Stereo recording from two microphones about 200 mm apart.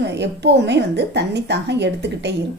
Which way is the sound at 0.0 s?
60° right (ahead or behind).